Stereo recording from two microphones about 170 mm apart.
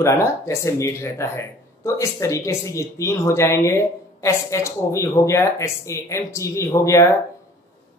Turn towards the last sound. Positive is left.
turn(degrees=15)  # may be behind; listen again after turning